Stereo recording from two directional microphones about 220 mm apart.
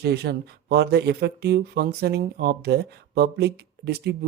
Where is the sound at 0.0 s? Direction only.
50° right (ahead or behind).